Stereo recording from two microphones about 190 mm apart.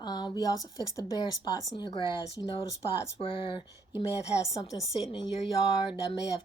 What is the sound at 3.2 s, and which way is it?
Speech, 30° left (ahead or behind).